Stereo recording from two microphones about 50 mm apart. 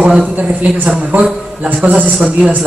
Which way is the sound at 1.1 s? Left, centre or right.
Right.